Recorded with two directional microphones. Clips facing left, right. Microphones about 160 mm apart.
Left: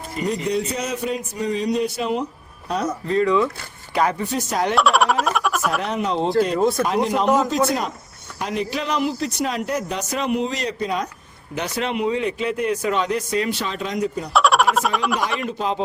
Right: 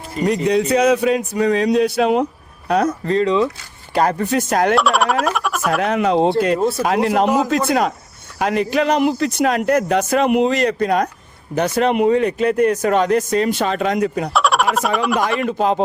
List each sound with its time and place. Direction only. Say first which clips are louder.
0.3 s a man's voice: right 7 dB; 80° right
2.6 s speech: right 7 dB; 70° right (ahead or behind)
3.1 s speech: even; 25° right (ahead or behind)
3.9 s speech: right 4 dB; 45° right (ahead or behind)
4.7 s speech: right 2 dB; centre (ahead or behind)
5.8 s speech: right 7 dB; 60° right (ahead or behind)
6.5 s speech: right 1 dB; 5° right (ahead or behind)
6.8 s speech: right 4 dB; 70° right (ahead or behind)
7.3 s speech: right 1 dB; centre (ahead or behind)
7.7 s speech: right 6 dB; 70° right (ahead or behind)
14.3 s a sound: left 2 dB; centre (ahead or behind)
15.4 s speech: right 6 dB; 50° right (ahead or behind)